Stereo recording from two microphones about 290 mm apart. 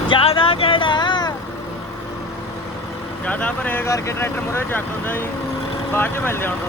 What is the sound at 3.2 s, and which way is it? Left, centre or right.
Speech, centre.